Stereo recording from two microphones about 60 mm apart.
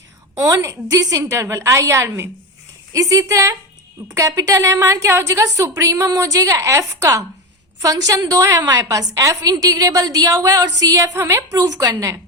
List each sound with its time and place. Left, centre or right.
0.6 s a woman's voice: right
2.0 s a woman's voice: right
2.9 s a woman's voice: right
7.8 s a woman's voice: right